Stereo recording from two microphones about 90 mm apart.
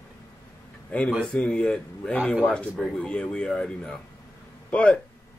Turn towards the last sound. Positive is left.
turn(degrees=15)  # may be behind; listen again after turning